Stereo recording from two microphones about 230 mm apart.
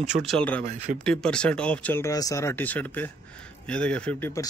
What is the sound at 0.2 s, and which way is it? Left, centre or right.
A man's voice, centre.